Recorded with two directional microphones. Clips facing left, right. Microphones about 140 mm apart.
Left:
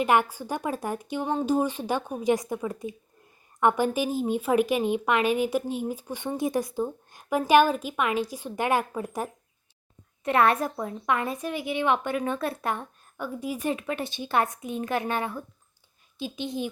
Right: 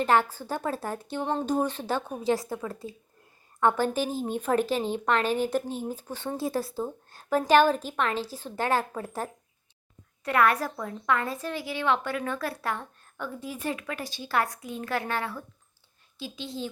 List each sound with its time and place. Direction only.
0.0 s a woman's voice: 15° left (ahead or behind)
1.2 s a woman's voice: 5° left (ahead or behind)
10.2 s a woman's voice: 25° left (ahead or behind)